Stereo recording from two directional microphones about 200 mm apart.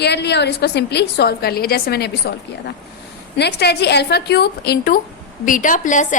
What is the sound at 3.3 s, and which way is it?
A woman's voice, 55° left (ahead or behind).